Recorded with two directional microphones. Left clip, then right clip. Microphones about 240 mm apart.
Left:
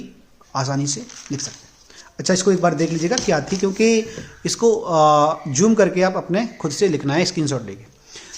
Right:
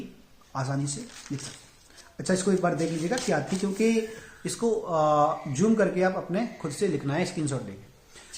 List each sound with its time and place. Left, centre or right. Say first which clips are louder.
0.5 s speech: left 9 dB; left